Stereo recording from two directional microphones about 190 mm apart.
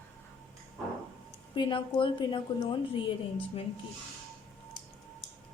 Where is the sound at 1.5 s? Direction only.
25° left (ahead or behind).